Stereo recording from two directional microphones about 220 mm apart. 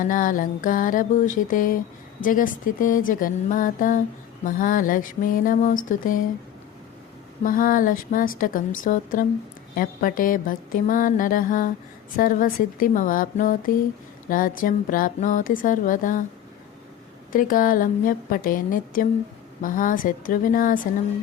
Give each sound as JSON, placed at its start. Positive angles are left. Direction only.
{"t": 0.0, "sound": "music", "side_deg": 35}
{"t": 7.4, "sound": "music", "side_deg": 40}
{"t": 17.3, "sound": "music", "side_deg": 40}